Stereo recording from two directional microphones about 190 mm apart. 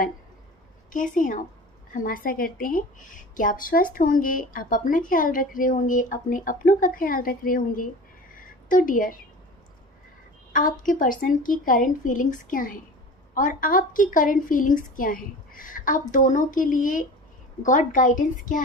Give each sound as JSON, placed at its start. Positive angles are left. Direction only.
{"t": 0.9, "sound": "a woman's voice", "side_deg": 45}
{"t": 8.4, "sound": "a sound", "side_deg": 45}
{"t": 10.8, "sound": "a woman's voice", "side_deg": 45}